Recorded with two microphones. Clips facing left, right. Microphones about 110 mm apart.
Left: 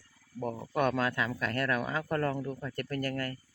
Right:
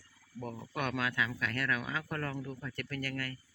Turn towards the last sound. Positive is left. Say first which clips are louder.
# left 5 dB
turn(degrees=40)  # may be behind; listen again after turning